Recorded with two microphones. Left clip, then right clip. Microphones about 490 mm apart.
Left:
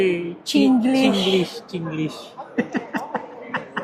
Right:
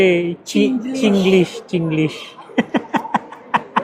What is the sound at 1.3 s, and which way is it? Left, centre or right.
Speech, right.